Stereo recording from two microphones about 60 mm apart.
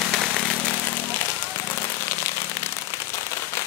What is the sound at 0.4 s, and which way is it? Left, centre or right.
Vehicle, centre.